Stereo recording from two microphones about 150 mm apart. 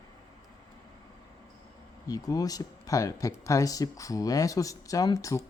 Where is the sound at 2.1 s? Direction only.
25° left (ahead or behind).